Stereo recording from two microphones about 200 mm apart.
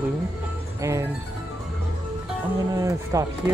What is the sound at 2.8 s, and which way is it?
Speech, 15° right (ahead or behind).